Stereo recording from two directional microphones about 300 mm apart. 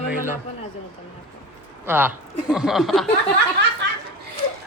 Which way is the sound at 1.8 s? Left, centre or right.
Centre.